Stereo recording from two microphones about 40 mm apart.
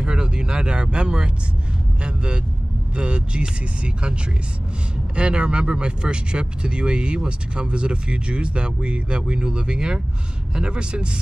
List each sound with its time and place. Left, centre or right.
0.0 s speech: right